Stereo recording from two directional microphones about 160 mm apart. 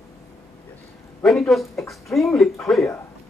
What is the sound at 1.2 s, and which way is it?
Speech, centre (ahead or behind).